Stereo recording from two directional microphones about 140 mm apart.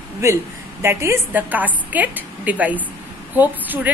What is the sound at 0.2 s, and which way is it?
A man's voice, 20° right (ahead or behind).